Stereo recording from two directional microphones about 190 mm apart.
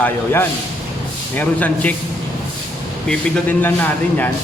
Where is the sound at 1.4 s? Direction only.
10° left (ahead or behind).